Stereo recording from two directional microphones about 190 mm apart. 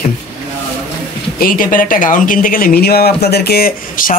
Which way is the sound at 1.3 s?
45° left (ahead or behind).